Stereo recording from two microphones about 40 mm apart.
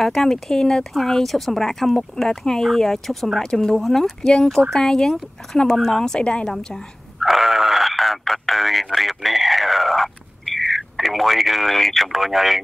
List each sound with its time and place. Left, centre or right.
0.0 s speech: centre
7.2 s a sound: centre
12.1 s speech: centre